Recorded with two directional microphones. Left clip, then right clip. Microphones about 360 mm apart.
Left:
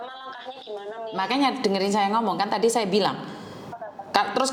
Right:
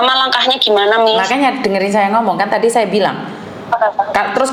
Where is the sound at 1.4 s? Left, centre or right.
Left.